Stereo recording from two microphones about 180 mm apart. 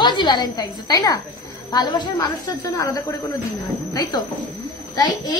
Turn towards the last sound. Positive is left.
turn(degrees=20)  # may be behind; listen again after turning